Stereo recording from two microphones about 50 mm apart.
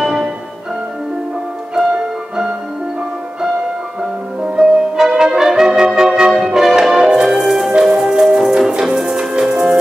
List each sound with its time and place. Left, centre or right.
4.4 s brass instrument: centre
6.4 s music: centre